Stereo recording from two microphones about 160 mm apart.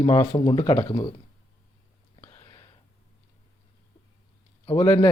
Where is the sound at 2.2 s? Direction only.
20° left (ahead or behind).